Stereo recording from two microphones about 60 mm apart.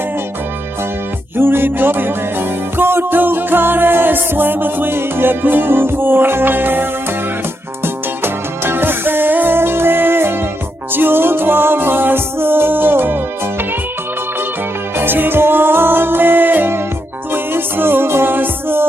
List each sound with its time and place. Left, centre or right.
1.4 s music: right
8.2 s music: right
14.9 s music: right